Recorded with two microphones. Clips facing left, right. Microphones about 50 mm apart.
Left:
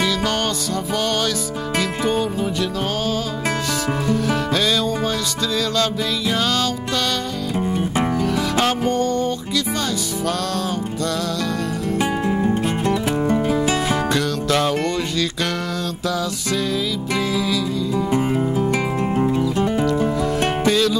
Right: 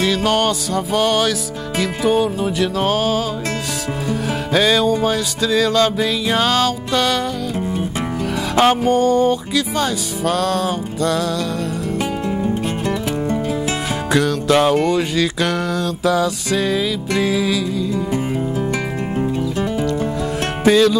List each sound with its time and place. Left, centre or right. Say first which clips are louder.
0.9 s music: right 5 dB; centre
8.5 s music: right 8 dB; centre
12.4 s music: left 1 dB; centre
14.1 s music: right 4 dB; centre
17.2 s music: right 4 dB; centre
19.1 s music: even; centre
20.6 s music: right 7 dB; centre